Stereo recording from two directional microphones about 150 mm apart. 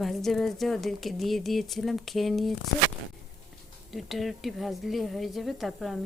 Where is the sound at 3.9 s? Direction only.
Centre (ahead or behind).